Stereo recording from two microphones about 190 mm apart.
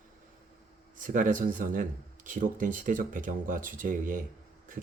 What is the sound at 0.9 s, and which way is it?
Speech, 45° right (ahead or behind).